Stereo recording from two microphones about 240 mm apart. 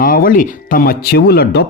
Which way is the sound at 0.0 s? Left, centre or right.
Left.